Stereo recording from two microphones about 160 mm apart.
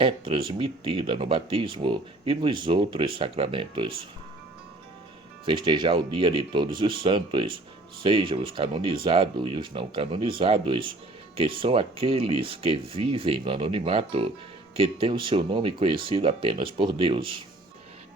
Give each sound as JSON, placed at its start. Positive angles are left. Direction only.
{"t": 0.0, "sound": "speech", "side_deg": -35}
{"t": 5.5, "sound": "speech", "side_deg": -30}